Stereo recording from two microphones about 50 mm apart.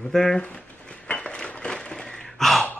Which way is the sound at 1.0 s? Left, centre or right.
Left.